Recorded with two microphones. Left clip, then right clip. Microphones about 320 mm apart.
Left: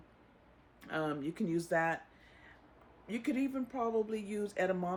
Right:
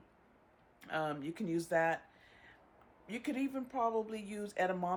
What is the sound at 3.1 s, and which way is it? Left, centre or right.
Speech, centre.